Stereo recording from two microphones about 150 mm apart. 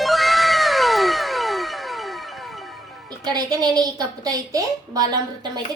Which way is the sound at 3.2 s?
25° right (ahead or behind).